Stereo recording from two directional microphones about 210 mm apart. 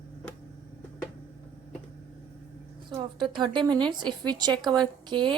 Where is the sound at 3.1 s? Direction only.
20° right (ahead or behind).